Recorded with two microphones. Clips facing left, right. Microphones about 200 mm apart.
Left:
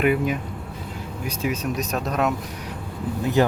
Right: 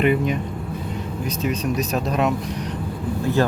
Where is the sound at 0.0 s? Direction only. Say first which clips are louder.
Right 1 dB; 5° left (ahead or behind).